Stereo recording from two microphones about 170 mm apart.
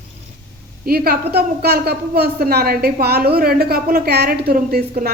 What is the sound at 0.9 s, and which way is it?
A woman's voice, 60° right (ahead or behind).